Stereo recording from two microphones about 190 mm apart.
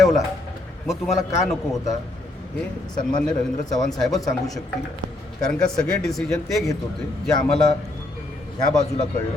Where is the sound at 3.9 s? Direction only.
Centre (ahead or behind).